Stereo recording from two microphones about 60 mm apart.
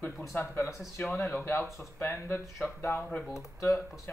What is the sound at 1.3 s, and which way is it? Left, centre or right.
Speech, left.